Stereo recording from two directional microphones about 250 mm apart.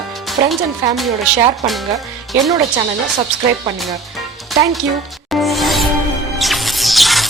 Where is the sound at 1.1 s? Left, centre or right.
Centre.